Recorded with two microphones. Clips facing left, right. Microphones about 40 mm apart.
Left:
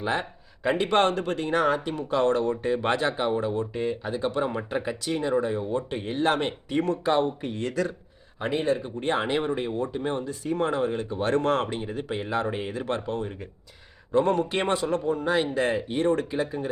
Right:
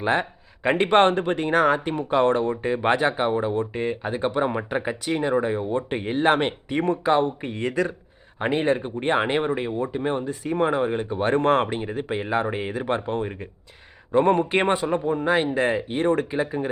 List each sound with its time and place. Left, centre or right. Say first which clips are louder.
0.0 s speech: right 5 dB; right
8.4 s speech: right 3 dB; right